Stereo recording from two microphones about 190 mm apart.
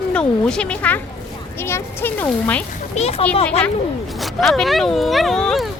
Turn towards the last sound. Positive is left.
turn(degrees=0)  # may be behind; listen again after turning